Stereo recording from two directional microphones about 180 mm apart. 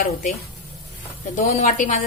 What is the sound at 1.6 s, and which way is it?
Speech, 45° left (ahead or behind).